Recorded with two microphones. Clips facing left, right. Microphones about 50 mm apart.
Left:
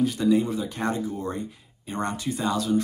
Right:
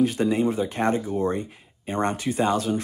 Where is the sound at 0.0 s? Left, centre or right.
Right.